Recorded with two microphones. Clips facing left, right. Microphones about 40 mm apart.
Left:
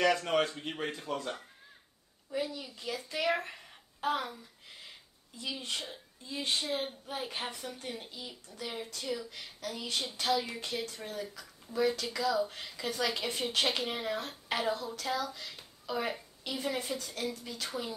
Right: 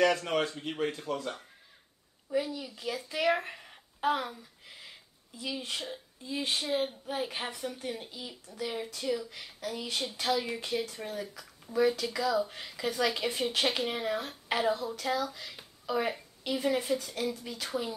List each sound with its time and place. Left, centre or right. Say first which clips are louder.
0.0 s speech: right 1 dB; centre
2.5 s a child's voice: right 3 dB; centre
4.4 s a sound: right 1 dB; centre
5.4 s speech: right 2 dB; centre